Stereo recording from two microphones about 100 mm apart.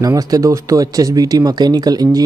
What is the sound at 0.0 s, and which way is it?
Speech, 40° right (ahead or behind).